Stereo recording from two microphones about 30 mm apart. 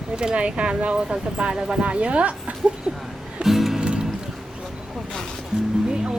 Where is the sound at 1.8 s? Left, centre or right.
Right.